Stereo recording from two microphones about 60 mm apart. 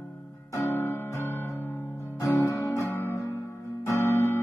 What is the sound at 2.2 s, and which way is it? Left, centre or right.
Music, left.